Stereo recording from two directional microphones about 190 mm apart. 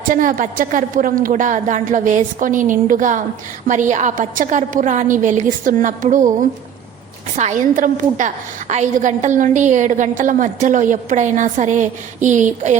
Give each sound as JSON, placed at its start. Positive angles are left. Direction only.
{"t": 0.1, "sound": "a woman's voice", "side_deg": -45}
{"t": 7.3, "sound": "a woman's voice", "side_deg": -40}